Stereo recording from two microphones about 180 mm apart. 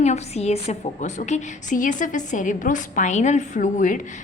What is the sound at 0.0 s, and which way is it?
A woman's voice, 40° left (ahead or behind).